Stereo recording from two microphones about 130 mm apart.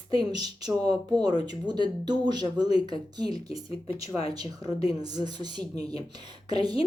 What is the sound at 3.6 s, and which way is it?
Speech, 45° left (ahead or behind).